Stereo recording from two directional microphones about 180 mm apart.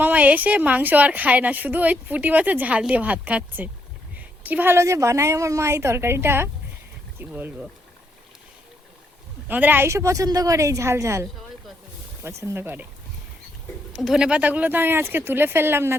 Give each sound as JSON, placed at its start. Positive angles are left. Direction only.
{"t": 0.0, "sound": "a woman's voice", "side_deg": -10}
{"t": 9.5, "sound": "a woman's voice", "side_deg": -10}
{"t": 14.0, "sound": "a woman's voice", "side_deg": -5}